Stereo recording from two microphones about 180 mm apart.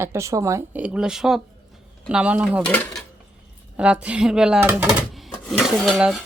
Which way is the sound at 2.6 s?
10° left (ahead or behind).